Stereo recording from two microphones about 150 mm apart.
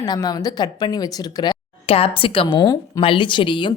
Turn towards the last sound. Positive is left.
turn(degrees=35)  # may be behind; listen again after turning